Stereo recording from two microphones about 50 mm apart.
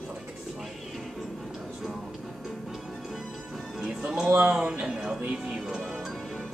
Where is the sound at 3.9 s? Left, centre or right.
Centre.